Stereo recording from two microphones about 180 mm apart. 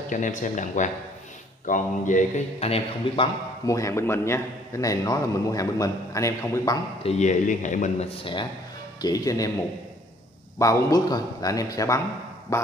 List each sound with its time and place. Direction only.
0.1 s a man's voice: 45° left (ahead or behind)
3.6 s a man's voice: 15° left (ahead or behind)
7.0 s a man's voice: 35° left (ahead or behind)
9.0 s a man's voice: 20° left (ahead or behind)
10.6 s a man's voice: 20° left (ahead or behind)